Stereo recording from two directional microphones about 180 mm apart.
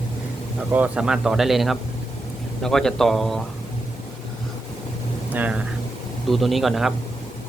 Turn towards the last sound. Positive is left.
turn(degrees=0)  # may be behind; listen again after turning